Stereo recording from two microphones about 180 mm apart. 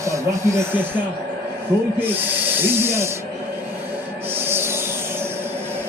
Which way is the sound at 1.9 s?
10° right (ahead or behind).